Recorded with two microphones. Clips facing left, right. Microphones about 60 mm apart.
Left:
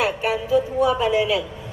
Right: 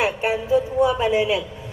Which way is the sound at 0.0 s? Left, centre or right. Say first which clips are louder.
Even; right.